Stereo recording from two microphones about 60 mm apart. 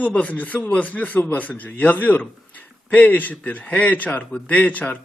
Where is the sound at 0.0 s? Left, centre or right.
Left.